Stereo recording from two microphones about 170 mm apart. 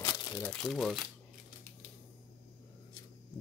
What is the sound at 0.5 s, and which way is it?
Speech, centre (ahead or behind).